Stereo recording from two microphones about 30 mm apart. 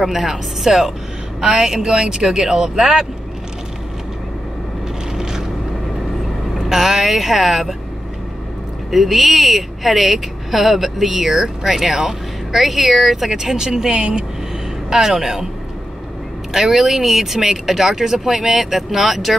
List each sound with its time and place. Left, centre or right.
0.0 s speech: centre
5.1 s vehicle: centre
6.7 s speech: centre
8.9 s speech: centre
13.3 s speech: centre
14.9 s speech: centre
16.5 s speech: centre